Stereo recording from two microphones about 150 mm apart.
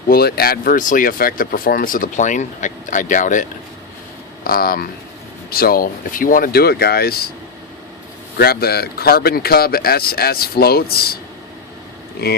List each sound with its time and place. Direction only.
0.1 s speech: 90° left; by 3.4 s 60° left (ahead or behind)
4.4 s speech: 80° left
8.4 s speech: 90° left